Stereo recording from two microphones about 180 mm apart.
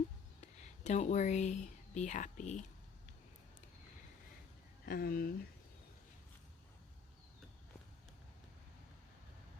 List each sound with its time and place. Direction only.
0.4 s speech: 40° left (ahead or behind)
4.9 s speech: 55° left (ahead or behind)